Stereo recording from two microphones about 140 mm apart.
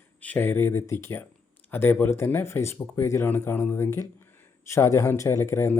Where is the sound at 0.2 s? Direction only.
15° left (ahead or behind).